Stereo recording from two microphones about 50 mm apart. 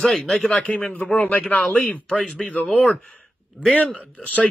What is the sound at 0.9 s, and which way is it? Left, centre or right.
A man's voice, left.